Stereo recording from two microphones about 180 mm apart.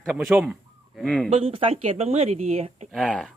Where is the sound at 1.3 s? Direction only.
30° right (ahead or behind).